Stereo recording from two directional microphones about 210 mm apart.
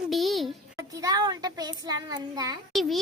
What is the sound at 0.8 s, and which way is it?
A child's voice, 15° right (ahead or behind).